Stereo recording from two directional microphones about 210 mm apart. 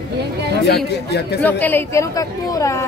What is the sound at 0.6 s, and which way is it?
Speech, 55° left (ahead or behind).